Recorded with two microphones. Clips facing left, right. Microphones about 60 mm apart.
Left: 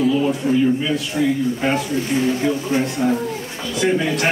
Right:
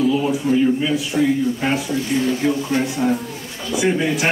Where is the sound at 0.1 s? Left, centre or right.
Centre.